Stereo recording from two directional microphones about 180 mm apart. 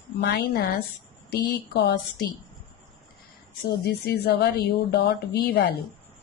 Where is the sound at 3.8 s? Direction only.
65° left (ahead or behind).